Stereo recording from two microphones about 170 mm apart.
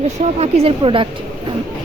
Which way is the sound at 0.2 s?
40° right (ahead or behind).